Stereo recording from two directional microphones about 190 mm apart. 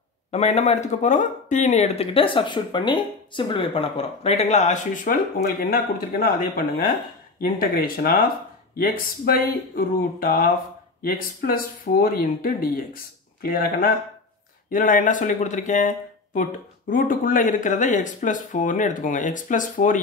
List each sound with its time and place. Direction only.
0.3 s speech: 35° left (ahead or behind)
16.9 s speech: 45° left (ahead or behind)